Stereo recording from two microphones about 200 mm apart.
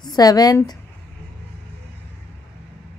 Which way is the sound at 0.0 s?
20° left (ahead or behind).